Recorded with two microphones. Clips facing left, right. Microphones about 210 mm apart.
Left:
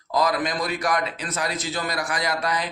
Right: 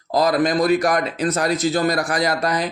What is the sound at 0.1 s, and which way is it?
A man's voice, 35° right (ahead or behind).